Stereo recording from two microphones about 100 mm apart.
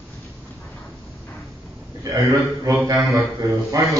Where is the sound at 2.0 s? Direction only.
35° right (ahead or behind).